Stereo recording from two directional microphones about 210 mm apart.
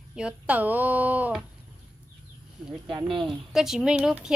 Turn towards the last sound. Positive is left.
turn(degrees=-5)  # may be behind; listen again after turning